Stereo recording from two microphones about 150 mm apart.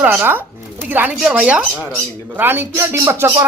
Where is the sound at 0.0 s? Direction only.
10° right (ahead or behind).